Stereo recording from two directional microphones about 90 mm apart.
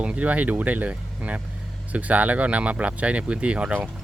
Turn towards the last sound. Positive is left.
turn(degrees=-15)  # may be behind; listen again after turning